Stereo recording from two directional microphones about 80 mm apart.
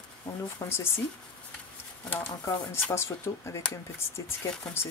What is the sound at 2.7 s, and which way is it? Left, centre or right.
Speech, left.